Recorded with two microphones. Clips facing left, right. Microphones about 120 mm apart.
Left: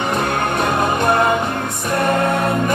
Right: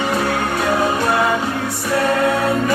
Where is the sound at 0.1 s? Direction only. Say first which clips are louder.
Even; 55° left (ahead or behind).